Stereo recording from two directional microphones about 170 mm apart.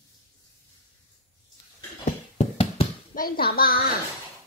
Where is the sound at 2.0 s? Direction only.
40° left (ahead or behind).